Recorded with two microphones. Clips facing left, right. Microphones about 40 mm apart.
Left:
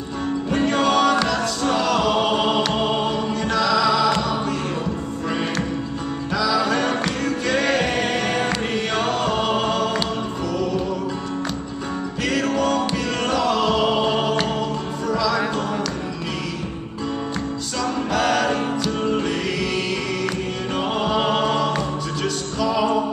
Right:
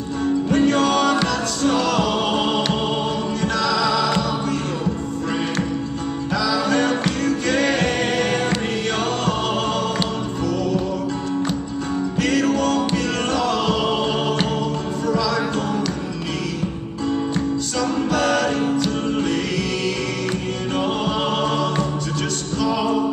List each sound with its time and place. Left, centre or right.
0.5 s music: centre
6.4 s music: centre
12.2 s music: centre
17.8 s music: centre
21.0 s choir: centre
22.6 s music: centre